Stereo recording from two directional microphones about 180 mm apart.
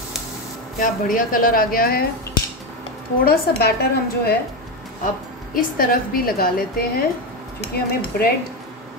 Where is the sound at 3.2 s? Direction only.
60° left (ahead or behind).